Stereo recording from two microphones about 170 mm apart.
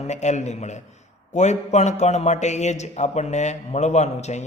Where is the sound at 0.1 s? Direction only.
45° left (ahead or behind).